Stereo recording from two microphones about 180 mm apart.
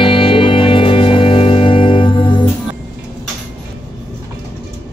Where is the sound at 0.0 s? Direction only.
30° left (ahead or behind).